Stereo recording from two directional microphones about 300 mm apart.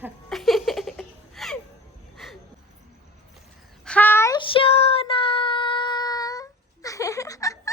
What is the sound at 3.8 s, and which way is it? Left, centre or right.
Child singing, centre.